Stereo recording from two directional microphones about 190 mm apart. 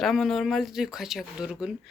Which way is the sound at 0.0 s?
Centre (ahead or behind).